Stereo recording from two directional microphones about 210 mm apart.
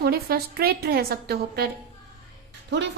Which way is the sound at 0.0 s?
45° right (ahead or behind).